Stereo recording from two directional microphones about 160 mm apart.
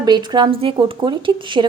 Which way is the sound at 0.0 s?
25° right (ahead or behind).